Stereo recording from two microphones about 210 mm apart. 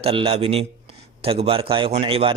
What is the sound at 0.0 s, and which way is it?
Speech, 25° right (ahead or behind).